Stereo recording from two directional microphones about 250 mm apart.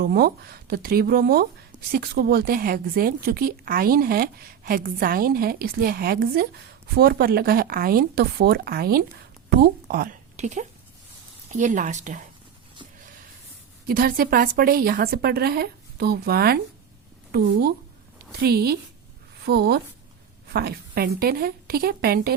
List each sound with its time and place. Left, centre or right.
0.0 s a woman's voice: right
13.8 s speech: right